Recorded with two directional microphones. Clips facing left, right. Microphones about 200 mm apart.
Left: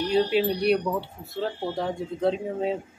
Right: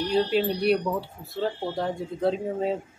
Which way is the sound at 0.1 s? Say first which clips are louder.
Left 1 dB; centre (ahead or behind).